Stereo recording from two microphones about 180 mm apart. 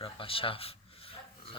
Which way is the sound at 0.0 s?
30° left (ahead or behind).